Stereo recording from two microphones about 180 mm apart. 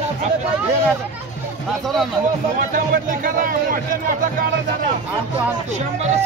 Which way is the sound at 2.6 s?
50° right (ahead or behind).